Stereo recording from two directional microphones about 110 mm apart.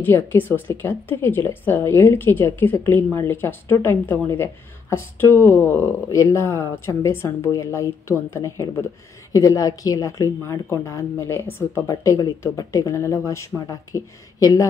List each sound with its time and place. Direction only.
0.0 s a woman's voice: 20° left (ahead or behind)